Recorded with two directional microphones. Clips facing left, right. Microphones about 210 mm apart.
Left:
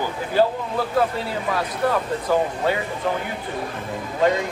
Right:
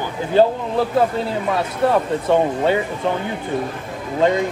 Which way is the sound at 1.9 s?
25° right (ahead or behind).